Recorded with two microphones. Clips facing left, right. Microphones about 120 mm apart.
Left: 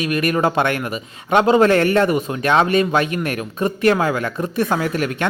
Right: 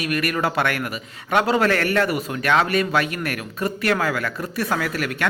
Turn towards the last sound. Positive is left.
turn(degrees=25)  # may be behind; listen again after turning